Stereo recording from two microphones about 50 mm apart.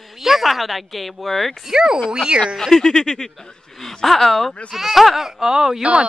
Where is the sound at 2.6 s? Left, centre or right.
Centre.